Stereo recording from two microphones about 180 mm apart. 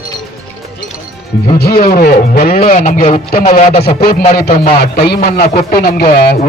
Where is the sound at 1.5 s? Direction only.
55° left (ahead or behind).